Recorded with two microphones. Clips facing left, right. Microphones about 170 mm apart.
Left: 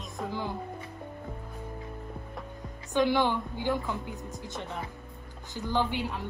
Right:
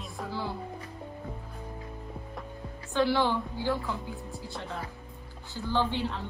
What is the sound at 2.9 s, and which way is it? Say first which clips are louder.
A woman's voice: left 1 dB; 15° left (ahead or behind).